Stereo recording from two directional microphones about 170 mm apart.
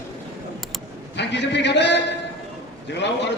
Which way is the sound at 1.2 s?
90° left.